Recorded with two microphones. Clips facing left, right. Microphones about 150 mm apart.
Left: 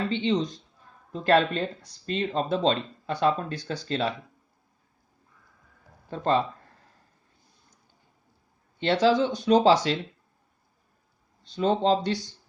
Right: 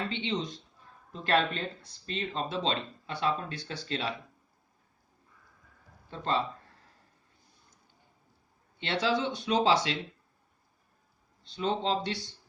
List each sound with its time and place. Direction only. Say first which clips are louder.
0.1 s speech: left 8 dB; 40° left (ahead or behind)
8.8 s speech: left 8 dB; 40° left (ahead or behind)
11.4 s speech: left 7 dB; 40° left (ahead or behind)